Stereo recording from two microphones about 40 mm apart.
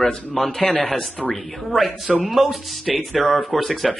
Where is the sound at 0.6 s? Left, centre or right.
Left.